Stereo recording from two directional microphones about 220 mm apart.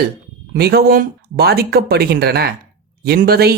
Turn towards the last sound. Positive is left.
turn(degrees=-45)  # may be behind; listen again after turning